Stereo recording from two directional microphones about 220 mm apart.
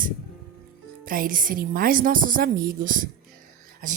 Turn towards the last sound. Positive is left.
turn(degrees=-35)  # may be behind; listen again after turning